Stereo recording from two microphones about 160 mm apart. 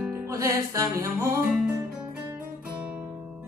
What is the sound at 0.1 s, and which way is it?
Music, 15° right (ahead or behind).